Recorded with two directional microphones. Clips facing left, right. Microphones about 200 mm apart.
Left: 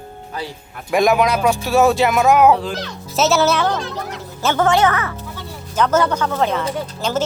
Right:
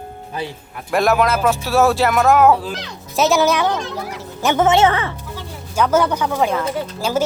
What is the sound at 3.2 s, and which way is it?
A woman's voice, 15° right (ahead or behind).